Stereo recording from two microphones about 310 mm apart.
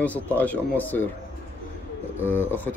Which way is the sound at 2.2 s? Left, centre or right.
Centre.